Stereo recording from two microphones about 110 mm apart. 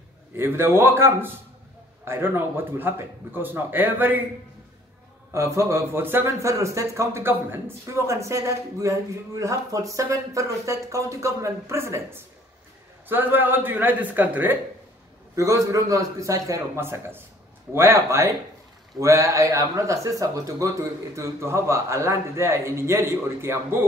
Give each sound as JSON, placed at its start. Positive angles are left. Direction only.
{"t": 0.4, "sound": "speech", "side_deg": -20}
{"t": 5.3, "sound": "speech", "side_deg": -25}
{"t": 15.3, "sound": "speech", "side_deg": -30}